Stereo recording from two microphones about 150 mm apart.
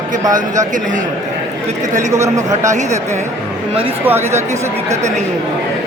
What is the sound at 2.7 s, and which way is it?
Speech, 50° right (ahead or behind).